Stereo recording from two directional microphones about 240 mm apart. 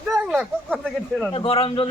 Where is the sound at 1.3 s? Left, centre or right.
Left.